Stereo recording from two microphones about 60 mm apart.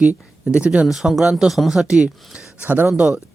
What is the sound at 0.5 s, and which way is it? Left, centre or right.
Speech, centre.